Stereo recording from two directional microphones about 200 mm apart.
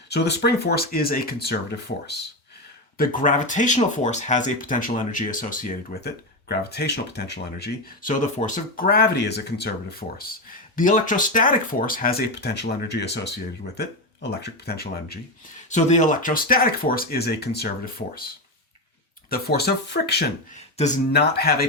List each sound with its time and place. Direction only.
0.1 s speech: 55° left (ahead or behind)
3.0 s speech: 40° left (ahead or behind); by 7.7 s 55° left (ahead or behind)
8.0 s speech: 40° left (ahead or behind); by 9.6 s 55° left (ahead or behind)
10.0 s speech: 40° left (ahead or behind)
15.7 s speech: 35° left (ahead or behind)
19.3 s speech: 55° left (ahead or behind)
20.7 s speech: 35° left (ahead or behind)
21.1 s speech: 55° left (ahead or behind)